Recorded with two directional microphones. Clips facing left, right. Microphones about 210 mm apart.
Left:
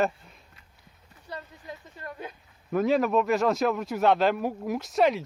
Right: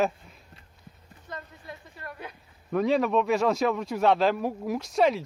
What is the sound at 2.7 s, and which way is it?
A man's voice, centre (ahead or behind).